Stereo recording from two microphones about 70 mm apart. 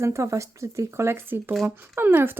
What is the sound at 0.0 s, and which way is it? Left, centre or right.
Speech, right.